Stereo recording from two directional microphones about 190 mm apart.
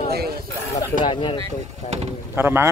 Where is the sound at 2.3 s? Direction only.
10° right (ahead or behind).